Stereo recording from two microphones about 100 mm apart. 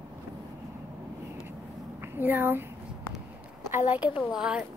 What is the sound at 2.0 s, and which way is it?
Speech, 20° right (ahead or behind).